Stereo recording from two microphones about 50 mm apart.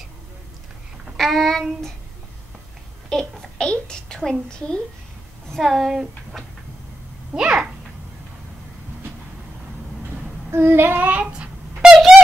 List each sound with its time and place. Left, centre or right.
1.1 s child singing: centre
3.1 s a child's voice: centre
5.5 s speech: centre
7.3 s a child's voice: centre
10.5 s child singing: right
11.0 s child singing: right
11.2 s a sound: centre